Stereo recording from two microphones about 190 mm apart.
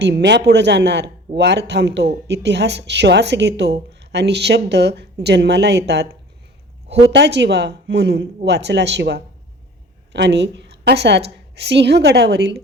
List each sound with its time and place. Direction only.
0.0 s a woman's voice: 65° right (ahead or behind)
7.1 s a woman's voice: 65° right (ahead or behind)